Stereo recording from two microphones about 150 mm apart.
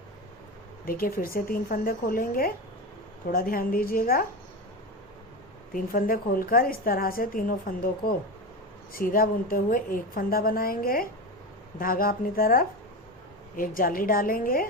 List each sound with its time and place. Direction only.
0.9 s a woman's voice: 75° left (ahead or behind)
5.7 s a woman's voice: 70° left (ahead or behind)